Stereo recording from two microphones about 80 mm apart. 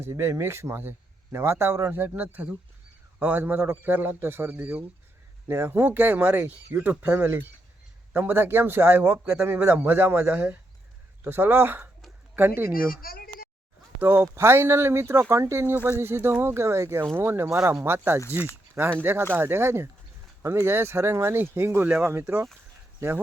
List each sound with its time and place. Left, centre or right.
0.1 s speech: right
14.0 s speech: right